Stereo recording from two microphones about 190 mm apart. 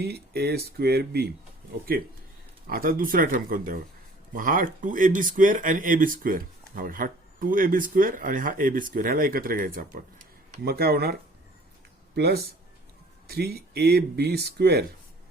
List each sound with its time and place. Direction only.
0.0 s speech: 60° right (ahead or behind); by 10.6 s 45° right (ahead or behind)
10.6 s speech: 55° right (ahead or behind)